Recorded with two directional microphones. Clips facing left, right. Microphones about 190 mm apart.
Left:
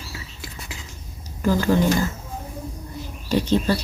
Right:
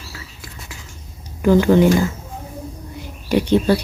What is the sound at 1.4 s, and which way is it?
Speech, 15° right (ahead or behind).